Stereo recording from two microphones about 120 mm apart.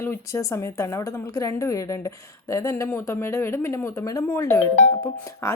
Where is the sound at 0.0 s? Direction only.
20° left (ahead or behind).